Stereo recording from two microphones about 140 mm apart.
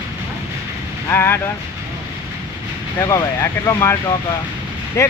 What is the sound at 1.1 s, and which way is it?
Speech, 15° left (ahead or behind).